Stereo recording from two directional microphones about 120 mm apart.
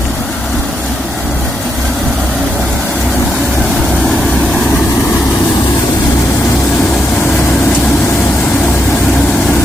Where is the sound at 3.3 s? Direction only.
Centre (ahead or behind).